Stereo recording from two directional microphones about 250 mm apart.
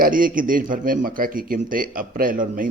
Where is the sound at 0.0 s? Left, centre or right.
Right.